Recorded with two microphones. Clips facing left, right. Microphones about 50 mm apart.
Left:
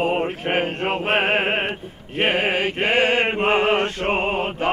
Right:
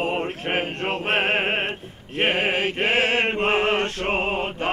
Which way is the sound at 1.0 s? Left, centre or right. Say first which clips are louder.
Left 2 dB; centre.